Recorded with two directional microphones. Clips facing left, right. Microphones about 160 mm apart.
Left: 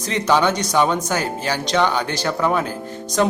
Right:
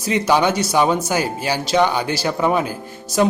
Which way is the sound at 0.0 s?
10° right (ahead or behind).